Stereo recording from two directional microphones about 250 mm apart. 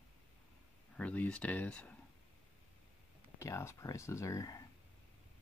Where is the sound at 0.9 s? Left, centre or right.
Centre.